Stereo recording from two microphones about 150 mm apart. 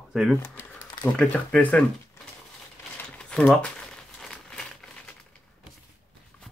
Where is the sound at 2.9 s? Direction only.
10° left (ahead or behind).